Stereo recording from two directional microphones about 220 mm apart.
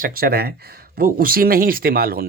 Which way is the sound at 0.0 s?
40° right (ahead or behind).